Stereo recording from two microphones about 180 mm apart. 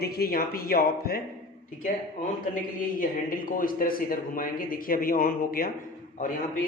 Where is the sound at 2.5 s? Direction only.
50° left (ahead or behind).